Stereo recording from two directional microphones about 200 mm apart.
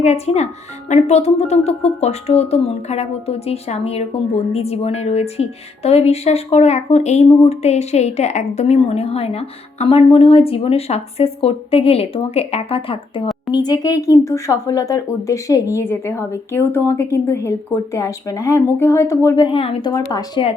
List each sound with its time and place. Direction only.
0.0 s speech: 35° left (ahead or behind)